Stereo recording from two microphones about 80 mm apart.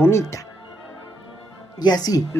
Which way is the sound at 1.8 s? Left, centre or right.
Left.